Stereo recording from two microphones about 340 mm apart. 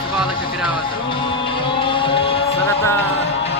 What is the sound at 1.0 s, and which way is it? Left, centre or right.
Music, centre.